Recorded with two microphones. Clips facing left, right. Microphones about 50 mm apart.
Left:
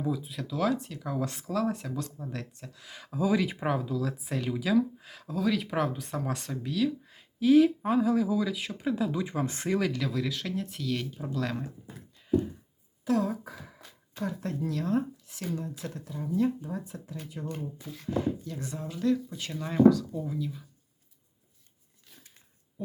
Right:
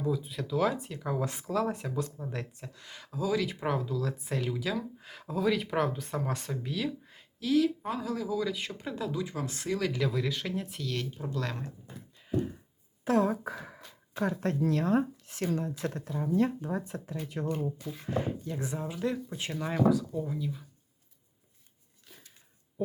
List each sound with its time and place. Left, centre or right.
0.0 s speech: centre
3.2 s speech: centre
7.3 s speech: left
9.1 s speech: left
9.9 s speech: centre
13.1 s speech: right
17.2 s speech: right
18.0 s speech: right
19.7 s speech: centre